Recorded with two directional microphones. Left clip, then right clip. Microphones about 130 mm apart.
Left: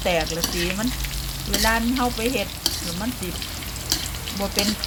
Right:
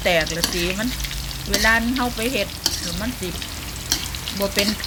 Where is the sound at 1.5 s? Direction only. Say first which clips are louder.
Right 3 dB; 5° right (ahead or behind).